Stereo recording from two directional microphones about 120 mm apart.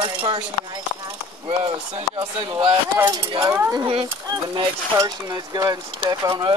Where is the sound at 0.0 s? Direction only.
45° right (ahead or behind).